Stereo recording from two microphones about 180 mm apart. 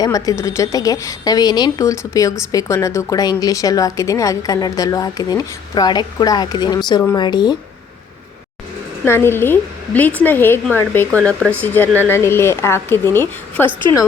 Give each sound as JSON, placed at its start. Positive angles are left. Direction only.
{"t": 0.0, "sound": "a woman's voice", "side_deg": 20}
{"t": 9.0, "sound": "a woman's voice", "side_deg": 15}